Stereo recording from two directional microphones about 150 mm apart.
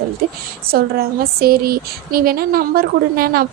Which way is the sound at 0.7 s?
85° right.